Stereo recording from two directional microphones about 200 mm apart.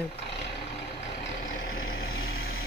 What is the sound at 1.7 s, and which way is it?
Vehicle, 50° left (ahead or behind).